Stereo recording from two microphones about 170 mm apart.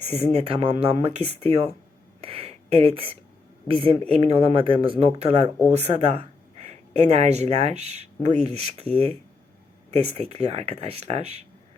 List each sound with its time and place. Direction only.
0.3 s speech: 35° right (ahead or behind)
2.2 s a sound: 35° right (ahead or behind)
3.7 s speech: 30° right (ahead or behind)
9.9 s speech: 40° right (ahead or behind)